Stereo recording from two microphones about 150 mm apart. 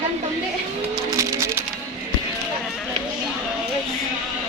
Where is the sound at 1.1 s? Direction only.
20° right (ahead or behind).